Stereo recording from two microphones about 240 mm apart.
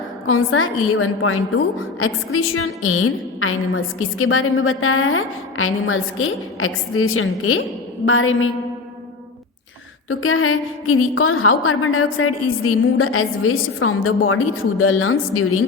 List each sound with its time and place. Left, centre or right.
0.3 s a woman's voice: left
10.1 s a woman's voice: left